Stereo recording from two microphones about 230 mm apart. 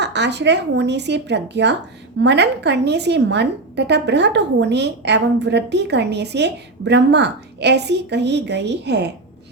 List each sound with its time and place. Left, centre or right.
0.0 s a woman's voice: right